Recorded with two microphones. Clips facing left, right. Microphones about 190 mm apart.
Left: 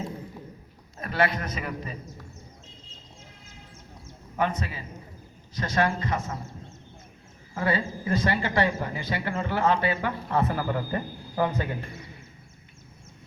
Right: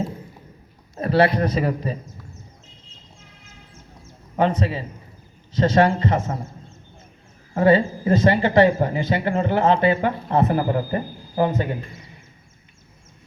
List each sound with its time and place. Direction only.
0.9 s a man's voice: 35° right (ahead or behind)
4.4 s speech: 30° right (ahead or behind)
7.6 s speech: 25° right (ahead or behind)